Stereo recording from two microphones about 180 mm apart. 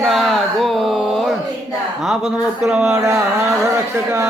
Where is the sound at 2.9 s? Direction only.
15° right (ahead or behind).